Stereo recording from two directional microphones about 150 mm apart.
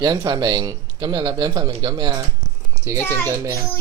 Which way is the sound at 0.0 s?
25° right (ahead or behind).